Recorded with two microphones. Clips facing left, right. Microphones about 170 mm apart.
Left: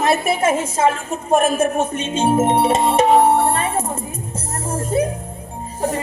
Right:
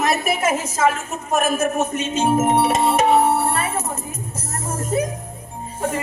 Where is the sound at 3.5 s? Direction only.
30° left (ahead or behind).